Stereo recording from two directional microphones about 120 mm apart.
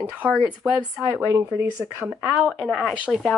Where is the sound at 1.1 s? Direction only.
25° right (ahead or behind).